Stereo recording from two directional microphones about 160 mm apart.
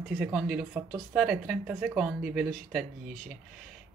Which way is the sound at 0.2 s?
Centre (ahead or behind).